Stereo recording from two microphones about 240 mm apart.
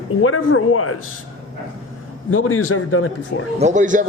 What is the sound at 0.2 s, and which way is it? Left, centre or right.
Speech, left.